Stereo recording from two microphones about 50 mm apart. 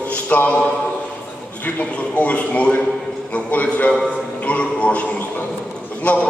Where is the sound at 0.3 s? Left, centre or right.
Left.